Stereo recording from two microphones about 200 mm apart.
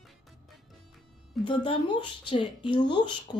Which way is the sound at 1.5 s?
25° left (ahead or behind).